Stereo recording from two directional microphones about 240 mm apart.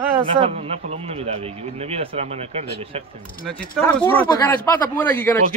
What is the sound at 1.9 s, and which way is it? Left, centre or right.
Speech, right.